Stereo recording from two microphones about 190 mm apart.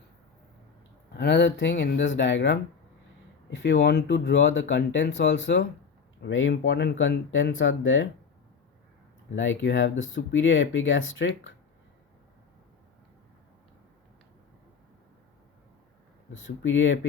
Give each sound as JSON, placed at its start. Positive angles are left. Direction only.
{"t": 1.1, "sound": "speech", "side_deg": 65}
{"t": 6.7, "sound": "speech", "side_deg": 65}
{"t": 9.3, "sound": "speech", "side_deg": 80}
{"t": 16.6, "sound": "speech", "side_deg": 80}